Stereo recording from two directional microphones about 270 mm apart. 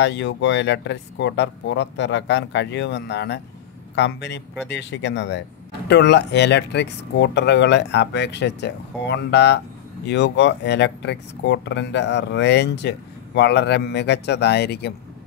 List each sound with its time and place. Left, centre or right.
0.0 s speech: left